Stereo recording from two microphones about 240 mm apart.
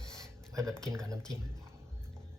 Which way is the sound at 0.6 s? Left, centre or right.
Centre.